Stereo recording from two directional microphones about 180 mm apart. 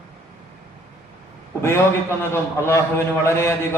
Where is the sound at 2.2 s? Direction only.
15° left (ahead or behind).